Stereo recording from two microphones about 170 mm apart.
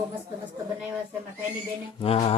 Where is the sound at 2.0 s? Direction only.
35° left (ahead or behind).